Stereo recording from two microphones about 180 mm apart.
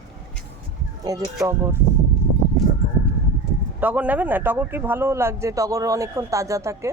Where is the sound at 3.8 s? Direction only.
10° right (ahead or behind).